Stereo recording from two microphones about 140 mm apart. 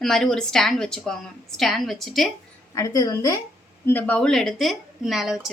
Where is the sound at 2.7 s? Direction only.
20° left (ahead or behind).